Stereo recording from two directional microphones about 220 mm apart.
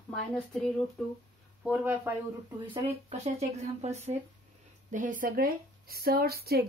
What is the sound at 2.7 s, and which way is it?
Speech, 25° right (ahead or behind).